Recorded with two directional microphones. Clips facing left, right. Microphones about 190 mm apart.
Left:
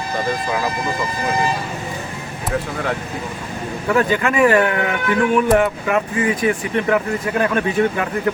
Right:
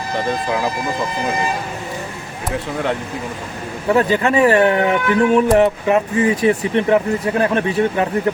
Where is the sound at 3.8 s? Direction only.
30° right (ahead or behind).